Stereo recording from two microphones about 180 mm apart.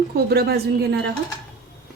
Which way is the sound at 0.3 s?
65° right (ahead or behind).